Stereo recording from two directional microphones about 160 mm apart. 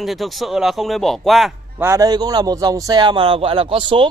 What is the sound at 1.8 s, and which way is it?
A man's voice, 20° right (ahead or behind).